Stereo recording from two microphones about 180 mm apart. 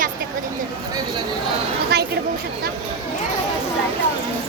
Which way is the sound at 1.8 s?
65° right (ahead or behind).